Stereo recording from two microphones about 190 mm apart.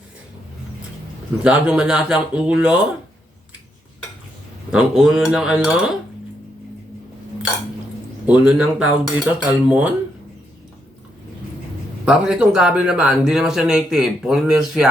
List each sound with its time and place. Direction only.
1.5 s speech: 5° right (ahead or behind)
4.7 s speech: 5° right (ahead or behind)
8.3 s speech: 5° right (ahead or behind)
12.0 s speech: 5° right (ahead or behind)